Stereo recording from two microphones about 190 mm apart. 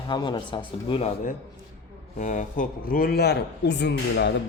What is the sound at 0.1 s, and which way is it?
Speech, 25° left (ahead or behind).